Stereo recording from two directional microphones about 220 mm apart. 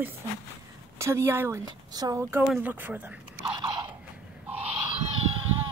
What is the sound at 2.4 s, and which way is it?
Speech, 5° right (ahead or behind).